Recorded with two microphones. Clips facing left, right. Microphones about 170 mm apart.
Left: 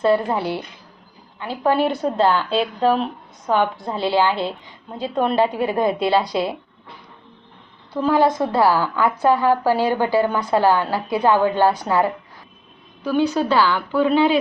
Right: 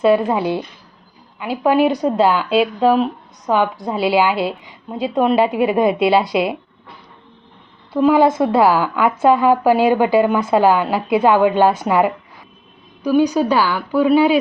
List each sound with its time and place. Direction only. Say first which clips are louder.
0.1 s a woman's voice: right 4 dB; 20° right (ahead or behind)
4.9 s a woman's voice: right 4 dB; 20° right (ahead or behind)
7.9 s a woman's voice: right 4 dB; 15° right (ahead or behind)